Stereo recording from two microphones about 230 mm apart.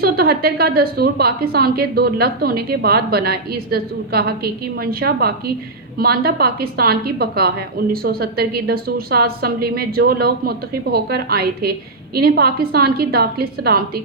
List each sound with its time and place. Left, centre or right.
0.0 s a woman's voice: right